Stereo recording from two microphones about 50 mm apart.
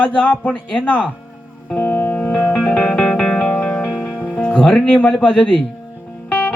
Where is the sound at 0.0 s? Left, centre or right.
Left.